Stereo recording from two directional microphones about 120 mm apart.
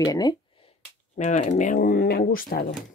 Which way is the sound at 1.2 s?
85° left.